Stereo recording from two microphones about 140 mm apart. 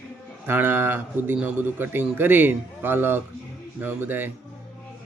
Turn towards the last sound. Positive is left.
turn(degrees=-15)  # may be behind; listen again after turning